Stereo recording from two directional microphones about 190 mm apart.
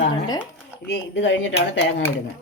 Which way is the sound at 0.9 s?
65° left (ahead or behind).